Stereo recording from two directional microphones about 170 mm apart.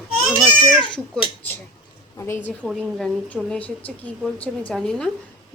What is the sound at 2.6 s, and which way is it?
A woman's voice, 5° left (ahead or behind).